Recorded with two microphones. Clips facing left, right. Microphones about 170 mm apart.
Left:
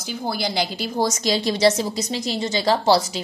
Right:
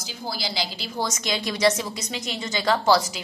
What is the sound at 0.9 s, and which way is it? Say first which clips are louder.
Speech: left 6 dB; 35° left (ahead or behind).